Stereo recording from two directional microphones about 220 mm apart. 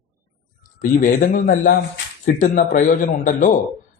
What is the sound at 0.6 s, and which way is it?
A man's voice, 35° left (ahead or behind).